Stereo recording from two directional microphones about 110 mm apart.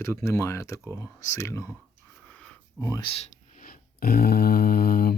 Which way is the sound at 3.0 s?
55° left (ahead or behind).